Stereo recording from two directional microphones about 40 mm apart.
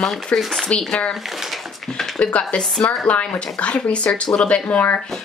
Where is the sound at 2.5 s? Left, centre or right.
Left.